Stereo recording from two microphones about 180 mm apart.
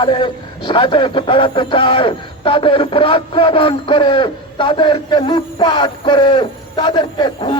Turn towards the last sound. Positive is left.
turn(degrees=25)  # may be behind; listen again after turning